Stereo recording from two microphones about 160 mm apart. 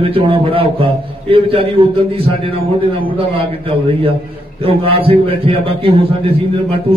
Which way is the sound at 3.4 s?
35° right (ahead or behind).